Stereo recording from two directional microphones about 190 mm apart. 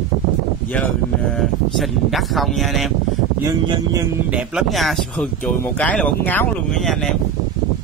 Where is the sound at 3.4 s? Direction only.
20° right (ahead or behind).